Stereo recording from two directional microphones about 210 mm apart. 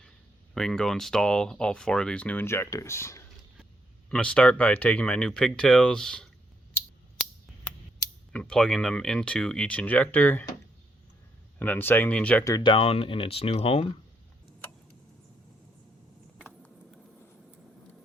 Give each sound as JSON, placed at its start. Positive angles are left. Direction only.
{"t": 0.5, "sound": "speech", "side_deg": 5}
{"t": 8.3, "sound": "speech", "side_deg": 5}
{"t": 11.6, "sound": "speech", "side_deg": 10}
{"t": 16.4, "sound": "a sound", "side_deg": 5}